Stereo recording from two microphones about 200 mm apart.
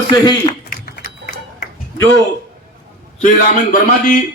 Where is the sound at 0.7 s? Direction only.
45° left (ahead or behind).